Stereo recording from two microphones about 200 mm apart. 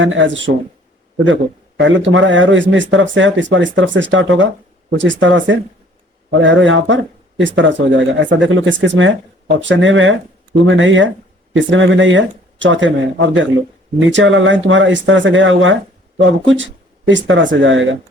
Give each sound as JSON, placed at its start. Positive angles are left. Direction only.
{"t": 0.0, "sound": "speech", "side_deg": -70}
{"t": 1.8, "sound": "speech", "side_deg": -70}